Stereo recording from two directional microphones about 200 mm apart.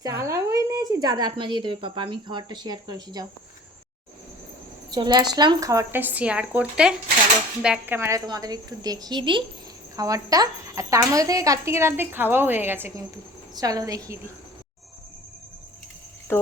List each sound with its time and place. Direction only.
0.0 s a woman's voice: 15° right (ahead or behind)
4.9 s a woman's voice: 20° right (ahead or behind)
16.3 s speech: 10° left (ahead or behind)